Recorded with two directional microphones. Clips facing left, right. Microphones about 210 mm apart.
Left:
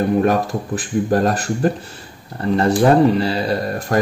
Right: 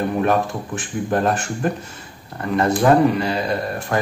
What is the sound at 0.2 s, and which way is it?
Speech, 40° left (ahead or behind).